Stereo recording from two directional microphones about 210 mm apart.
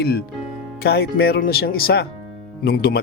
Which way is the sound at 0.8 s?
50° left (ahead or behind).